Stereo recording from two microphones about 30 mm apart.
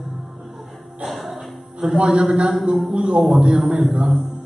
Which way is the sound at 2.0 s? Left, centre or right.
Right.